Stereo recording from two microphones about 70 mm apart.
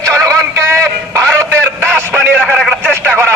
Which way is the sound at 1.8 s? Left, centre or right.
Right.